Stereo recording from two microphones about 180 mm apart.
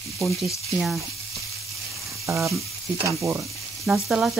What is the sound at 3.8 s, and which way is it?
Frying, 5° right (ahead or behind).